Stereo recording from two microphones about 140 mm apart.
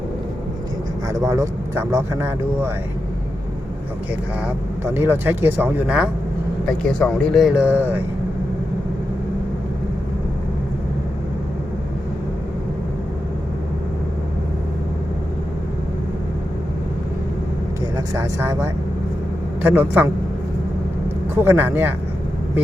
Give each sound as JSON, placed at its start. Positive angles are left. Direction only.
{"t": 1.0, "sound": "speech", "side_deg": -25}
{"t": 4.9, "sound": "speech", "side_deg": -15}
{"t": 6.7, "sound": "speech", "side_deg": 5}
{"t": 17.9, "sound": "speech", "side_deg": -20}
{"t": 21.3, "sound": "speech", "side_deg": -15}